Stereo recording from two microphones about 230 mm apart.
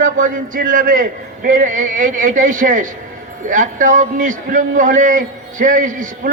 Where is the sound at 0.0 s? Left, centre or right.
Right.